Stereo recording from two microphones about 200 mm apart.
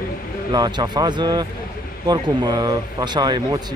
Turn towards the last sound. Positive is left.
turn(degrees=-20)  # may be behind; listen again after turning